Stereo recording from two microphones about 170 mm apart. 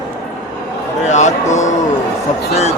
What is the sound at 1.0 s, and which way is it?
Speech, 45° left (ahead or behind).